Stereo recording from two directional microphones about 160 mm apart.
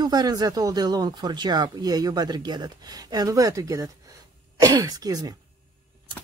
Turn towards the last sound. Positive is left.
turn(degrees=-25)  # may be behind; listen again after turning